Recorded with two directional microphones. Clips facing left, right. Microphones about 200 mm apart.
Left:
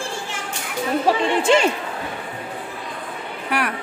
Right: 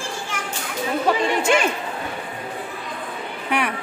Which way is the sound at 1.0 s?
30° left (ahead or behind).